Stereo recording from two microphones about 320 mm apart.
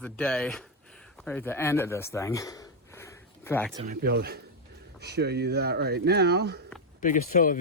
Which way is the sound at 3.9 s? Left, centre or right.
Right.